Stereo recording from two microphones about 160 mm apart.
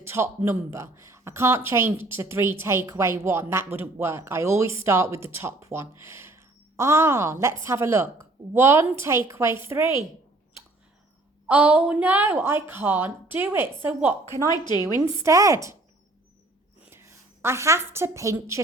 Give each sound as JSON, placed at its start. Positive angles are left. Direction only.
{"t": 0.0, "sound": "a woman's voice", "side_deg": -15}
{"t": 11.4, "sound": "a woman's voice", "side_deg": -10}
{"t": 14.5, "sound": "a woman's voice", "side_deg": 25}
{"t": 15.2, "sound": "speech", "side_deg": -20}
{"t": 16.8, "sound": "a woman's voice", "side_deg": -15}